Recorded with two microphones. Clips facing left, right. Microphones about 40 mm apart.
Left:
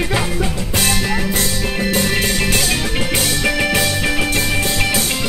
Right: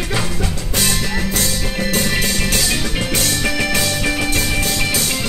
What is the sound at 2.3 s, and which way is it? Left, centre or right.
Music, centre.